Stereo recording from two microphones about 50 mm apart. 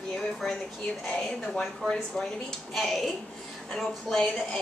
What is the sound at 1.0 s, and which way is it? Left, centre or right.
Speech, centre.